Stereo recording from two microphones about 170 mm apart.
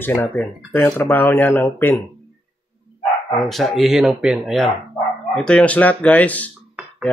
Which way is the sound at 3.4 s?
5° left (ahead or behind).